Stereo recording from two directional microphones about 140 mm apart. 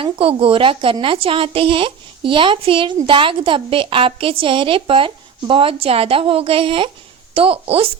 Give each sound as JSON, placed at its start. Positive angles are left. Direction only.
{"t": 0.0, "sound": "a woman's voice", "side_deg": -40}